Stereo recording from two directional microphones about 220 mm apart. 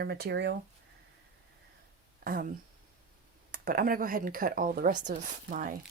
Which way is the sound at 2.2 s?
40° right (ahead or behind).